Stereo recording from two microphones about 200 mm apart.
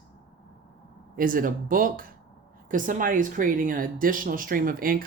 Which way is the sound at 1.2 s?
45° right (ahead or behind).